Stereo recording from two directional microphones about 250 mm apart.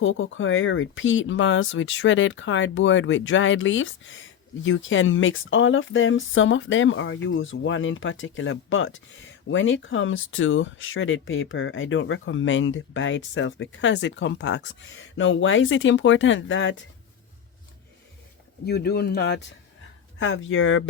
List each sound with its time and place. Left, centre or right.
0.0 s speech: left
18.6 s speech: left